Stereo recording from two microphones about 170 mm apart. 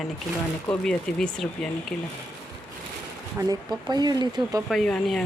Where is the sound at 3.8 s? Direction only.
25° right (ahead or behind).